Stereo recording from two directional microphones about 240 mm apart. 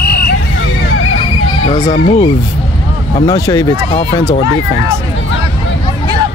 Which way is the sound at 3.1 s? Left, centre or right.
Centre.